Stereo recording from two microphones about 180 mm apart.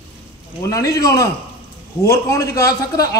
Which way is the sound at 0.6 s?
20° left (ahead or behind).